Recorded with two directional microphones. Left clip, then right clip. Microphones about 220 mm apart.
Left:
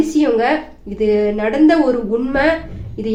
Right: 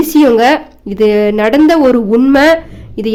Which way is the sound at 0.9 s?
50° right (ahead or behind).